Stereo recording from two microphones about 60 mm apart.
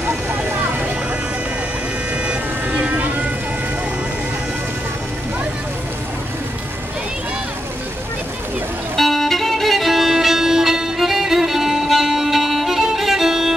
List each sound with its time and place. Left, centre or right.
2.2 s vehicle: right
8.9 s violin: centre